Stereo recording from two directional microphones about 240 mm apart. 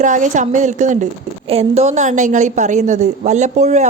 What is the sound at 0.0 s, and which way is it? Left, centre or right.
A woman's voice, right.